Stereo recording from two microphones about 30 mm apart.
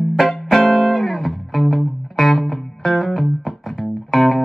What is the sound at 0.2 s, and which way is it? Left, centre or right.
Music, centre.